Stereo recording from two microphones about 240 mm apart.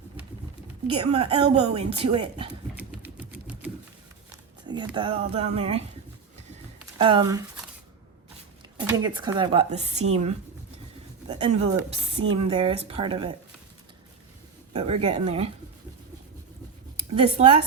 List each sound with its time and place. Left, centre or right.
0.9 s speech: right
2.7 s typewriter: centre
4.9 s speech: right
7.0 s speech: centre
8.9 s speech: centre
14.7 s speech: right
17.2 s speech: right